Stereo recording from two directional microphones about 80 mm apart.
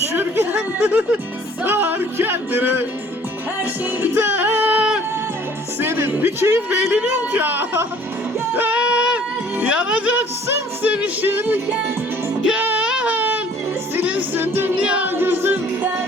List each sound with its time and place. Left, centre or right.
0.1 s speech: right
1.6 s music: right
7.0 s speech: right
8.5 s music: centre
9.6 s speech: centre
12.5 s a sound: centre
14.0 s music: right
14.8 s music: centre